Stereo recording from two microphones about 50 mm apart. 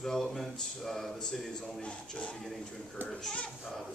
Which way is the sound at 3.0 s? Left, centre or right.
Right.